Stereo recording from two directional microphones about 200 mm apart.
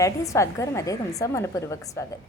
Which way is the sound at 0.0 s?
15° left (ahead or behind).